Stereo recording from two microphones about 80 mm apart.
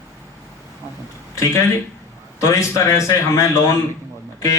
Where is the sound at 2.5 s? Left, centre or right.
Left.